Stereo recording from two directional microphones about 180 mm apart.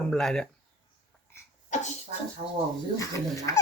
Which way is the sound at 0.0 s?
5° left (ahead or behind).